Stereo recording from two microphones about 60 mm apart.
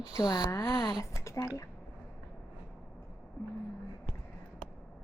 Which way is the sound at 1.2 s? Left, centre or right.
Left.